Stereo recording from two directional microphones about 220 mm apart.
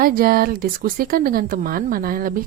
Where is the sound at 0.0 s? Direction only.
40° right (ahead or behind).